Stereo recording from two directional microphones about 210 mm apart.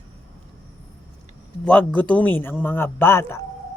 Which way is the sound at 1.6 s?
5° left (ahead or behind).